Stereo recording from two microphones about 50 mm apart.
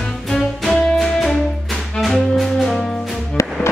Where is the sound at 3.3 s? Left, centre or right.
Left.